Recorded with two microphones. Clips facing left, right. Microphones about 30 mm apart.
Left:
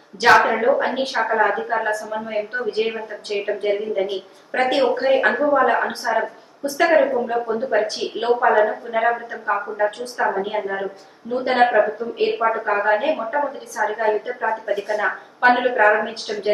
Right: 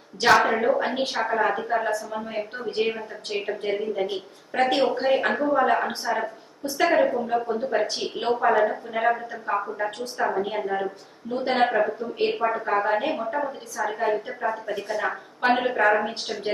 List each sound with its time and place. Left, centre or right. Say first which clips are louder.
0.3 s speech: left 4 dB; left
0.8 s a woman's voice: left 4 dB; centre
9.3 s speech: left 4 dB; left
10.4 s a woman's voice: left 2 dB; centre
11.7 s a woman's voice: left 6 dB; left
12.4 s speech: left 4 dB; left
13.0 s a woman's voice: left 5 dB; centre